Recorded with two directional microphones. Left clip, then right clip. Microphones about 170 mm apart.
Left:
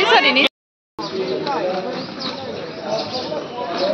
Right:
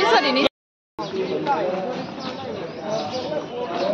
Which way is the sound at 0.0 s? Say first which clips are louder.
Left 4 dB; 5° left (ahead or behind).